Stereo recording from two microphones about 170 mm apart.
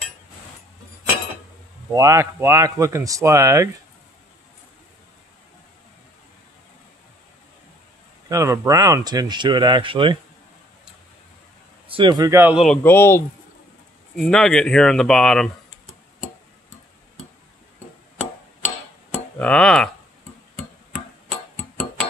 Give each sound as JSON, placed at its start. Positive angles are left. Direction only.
{"t": 1.9, "sound": "speech", "side_deg": -20}
{"t": 8.3, "sound": "speech", "side_deg": -20}
{"t": 11.9, "sound": "speech", "side_deg": -25}
{"t": 12.5, "sound": "speech", "side_deg": 5}
{"t": 14.1, "sound": "speech", "side_deg": 5}
{"t": 19.3, "sound": "speech", "side_deg": 5}